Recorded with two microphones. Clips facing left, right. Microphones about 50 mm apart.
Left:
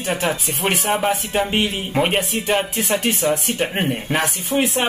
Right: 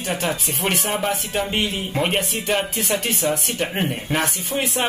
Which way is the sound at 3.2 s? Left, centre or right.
Left.